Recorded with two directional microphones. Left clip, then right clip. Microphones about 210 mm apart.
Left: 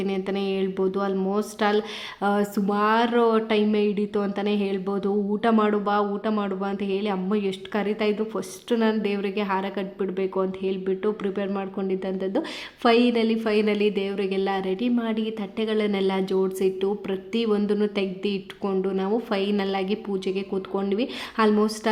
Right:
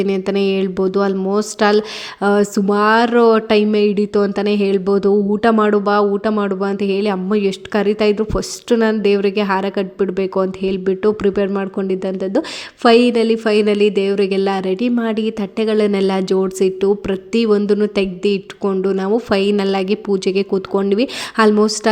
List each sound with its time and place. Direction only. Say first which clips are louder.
0.0 s speech: right 10 dB; 30° right (ahead or behind)